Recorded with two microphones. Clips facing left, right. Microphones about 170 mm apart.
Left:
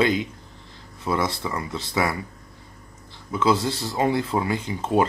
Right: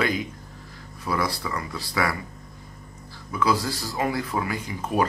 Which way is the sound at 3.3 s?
25° left (ahead or behind).